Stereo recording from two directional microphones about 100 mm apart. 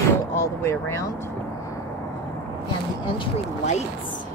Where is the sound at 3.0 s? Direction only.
55° left (ahead or behind).